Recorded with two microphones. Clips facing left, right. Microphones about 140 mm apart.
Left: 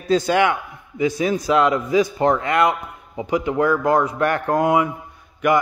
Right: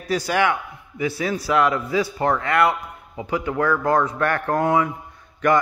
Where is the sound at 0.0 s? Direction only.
25° left (ahead or behind).